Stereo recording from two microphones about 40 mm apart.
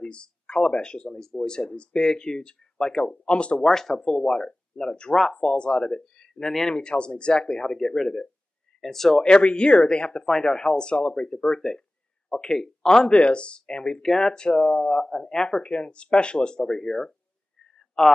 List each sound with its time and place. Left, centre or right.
0.0 s speech: left
3.6 s speech: centre
6.7 s speech: left
8.8 s speech: centre
9.2 s speech: left; by 17.1 s centre